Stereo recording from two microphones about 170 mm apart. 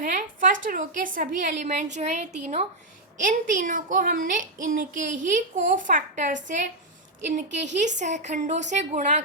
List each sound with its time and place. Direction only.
0.0 s a woman's voice: 50° right (ahead or behind)
3.5 s a woman's voice: 50° right (ahead or behind)